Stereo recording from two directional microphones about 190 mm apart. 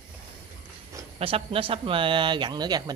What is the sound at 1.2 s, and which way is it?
Speech, 30° right (ahead or behind).